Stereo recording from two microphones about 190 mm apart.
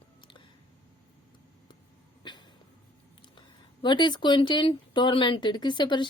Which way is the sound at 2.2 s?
25° left (ahead or behind).